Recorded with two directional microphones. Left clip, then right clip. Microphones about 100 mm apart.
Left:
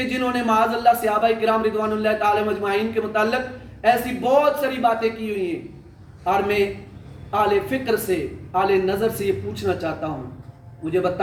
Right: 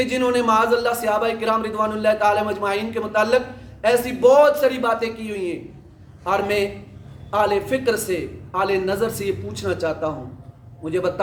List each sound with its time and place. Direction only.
0.0 s speech: 40° right (ahead or behind)